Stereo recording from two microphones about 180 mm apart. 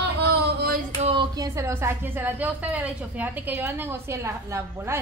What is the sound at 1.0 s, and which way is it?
A woman's voice, 25° right (ahead or behind).